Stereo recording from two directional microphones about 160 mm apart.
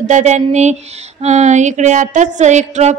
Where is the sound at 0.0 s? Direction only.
50° right (ahead or behind).